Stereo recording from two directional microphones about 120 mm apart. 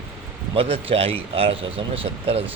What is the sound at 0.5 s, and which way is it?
Speech, 50° right (ahead or behind).